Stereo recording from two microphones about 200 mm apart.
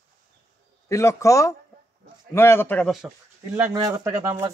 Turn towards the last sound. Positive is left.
turn(degrees=-15)  # may be behind; listen again after turning